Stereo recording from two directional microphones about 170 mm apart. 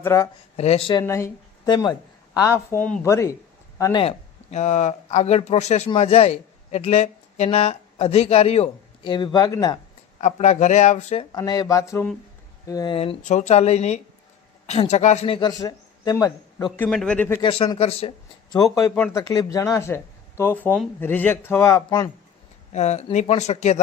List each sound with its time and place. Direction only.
0.0 s speech: 15° left (ahead or behind)
0.5 s a man's voice: 40° left (ahead or behind)
1.0 s a woman's voice: 15° left (ahead or behind)
4.5 s a man's voice: 40° left (ahead or behind); by 9.8 s 20° left (ahead or behind)
10.2 s speech: 45° left (ahead or behind)
11.3 s a sound: 20° left (ahead or behind)
13.0 s a man's voice: 40° left (ahead or behind); by 16.7 s 20° left (ahead or behind)
16.7 s speech: 5° left (ahead or behind)
17.4 s a man's voice: 30° left (ahead or behind)
18.5 s a sound: 20° left (ahead or behind)
19.1 s speech: 20° left (ahead or behind)
22.7 s a man's voice: 40° left (ahead or behind)